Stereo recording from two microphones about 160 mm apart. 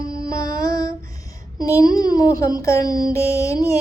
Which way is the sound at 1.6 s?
20° left (ahead or behind).